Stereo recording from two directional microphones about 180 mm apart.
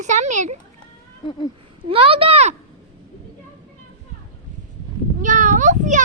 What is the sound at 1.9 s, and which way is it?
Speech, 30° right (ahead or behind).